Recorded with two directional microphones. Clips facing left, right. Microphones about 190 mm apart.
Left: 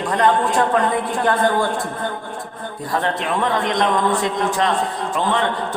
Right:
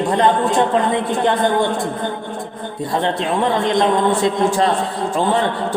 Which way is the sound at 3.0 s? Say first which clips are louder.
Right 3 dB; 25° right (ahead or behind).